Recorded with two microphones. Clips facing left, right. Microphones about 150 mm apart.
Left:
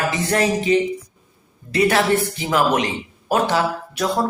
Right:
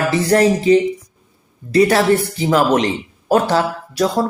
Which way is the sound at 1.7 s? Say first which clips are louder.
Right 4 dB; 40° right (ahead or behind).